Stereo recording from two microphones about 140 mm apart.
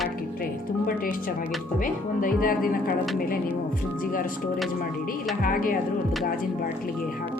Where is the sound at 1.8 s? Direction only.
80° left.